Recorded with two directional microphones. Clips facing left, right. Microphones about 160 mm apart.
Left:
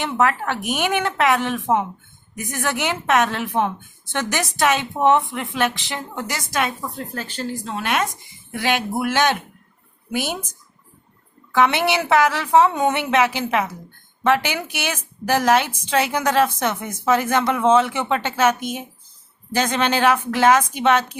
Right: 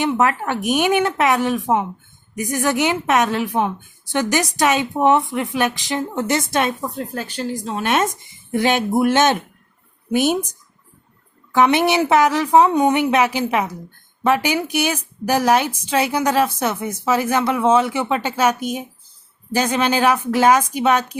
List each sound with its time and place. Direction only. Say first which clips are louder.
0.0 s a woman's voice: right 2 dB; 15° right (ahead or behind)
11.5 s a woman's voice: right 3 dB; 20° right (ahead or behind)